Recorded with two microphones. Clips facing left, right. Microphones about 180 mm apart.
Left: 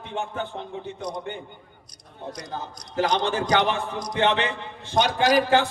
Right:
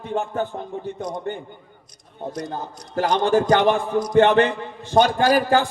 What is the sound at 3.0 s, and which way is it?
A man's voice, 45° right (ahead or behind).